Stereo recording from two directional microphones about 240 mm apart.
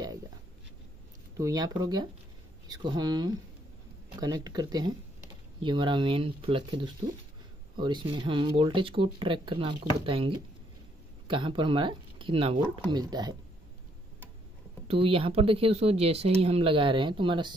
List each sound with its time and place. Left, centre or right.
1.3 s speech: centre
14.9 s speech: right